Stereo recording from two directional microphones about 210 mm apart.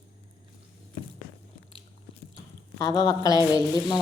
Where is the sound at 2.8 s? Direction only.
20° left (ahead or behind).